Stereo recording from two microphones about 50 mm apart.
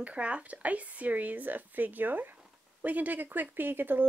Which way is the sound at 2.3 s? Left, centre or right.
Right.